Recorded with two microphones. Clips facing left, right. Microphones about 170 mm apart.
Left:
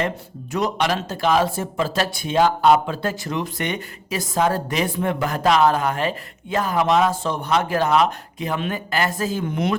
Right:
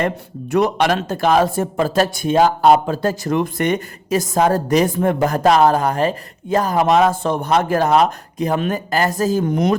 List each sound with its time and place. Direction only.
0.5 s speech: 55° right (ahead or behind); by 9.7 s 40° right (ahead or behind)